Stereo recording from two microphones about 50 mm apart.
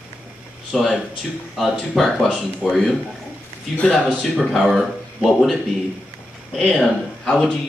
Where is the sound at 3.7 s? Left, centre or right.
Centre.